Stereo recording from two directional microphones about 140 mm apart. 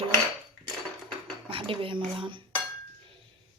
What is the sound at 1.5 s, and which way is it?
Cutlery, 40° right (ahead or behind).